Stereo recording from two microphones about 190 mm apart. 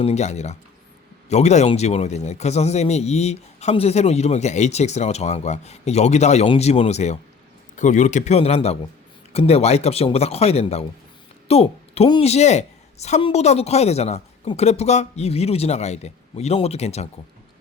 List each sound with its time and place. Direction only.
0.0 s a man's voice: 35° left (ahead or behind)